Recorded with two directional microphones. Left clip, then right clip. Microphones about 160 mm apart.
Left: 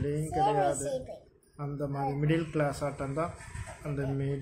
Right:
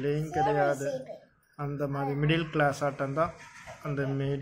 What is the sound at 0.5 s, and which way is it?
A man's voice, 15° right (ahead or behind).